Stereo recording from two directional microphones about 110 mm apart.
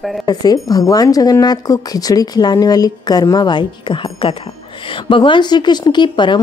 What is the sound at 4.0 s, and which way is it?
A woman's voice, 55° left (ahead or behind).